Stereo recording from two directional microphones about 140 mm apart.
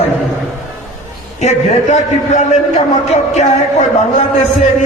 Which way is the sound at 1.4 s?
55° left (ahead or behind).